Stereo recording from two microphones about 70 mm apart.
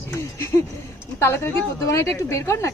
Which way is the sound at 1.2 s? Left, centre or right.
Left.